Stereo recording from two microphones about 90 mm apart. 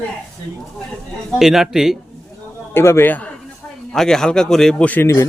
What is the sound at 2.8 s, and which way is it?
Speech, 25° left (ahead or behind).